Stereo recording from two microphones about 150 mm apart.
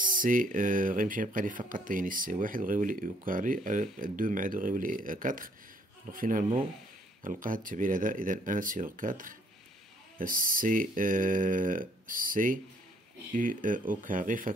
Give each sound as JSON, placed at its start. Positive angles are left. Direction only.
{"t": 0.0, "sound": "speech", "side_deg": -65}